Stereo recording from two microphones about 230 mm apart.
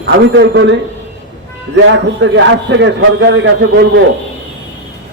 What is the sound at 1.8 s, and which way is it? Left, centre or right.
A man's voice, right.